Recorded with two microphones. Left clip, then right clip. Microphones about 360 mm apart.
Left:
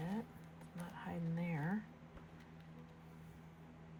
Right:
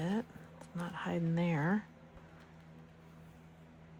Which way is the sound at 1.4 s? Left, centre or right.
Centre.